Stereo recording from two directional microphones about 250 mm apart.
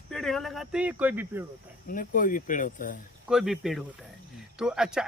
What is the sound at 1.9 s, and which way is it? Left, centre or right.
Speech, left.